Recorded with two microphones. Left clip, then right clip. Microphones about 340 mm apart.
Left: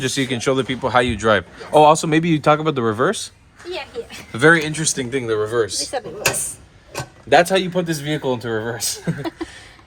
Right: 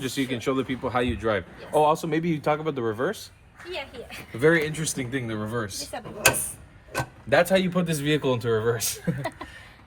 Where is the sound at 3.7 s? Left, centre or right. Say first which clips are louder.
Left 7 dB; centre.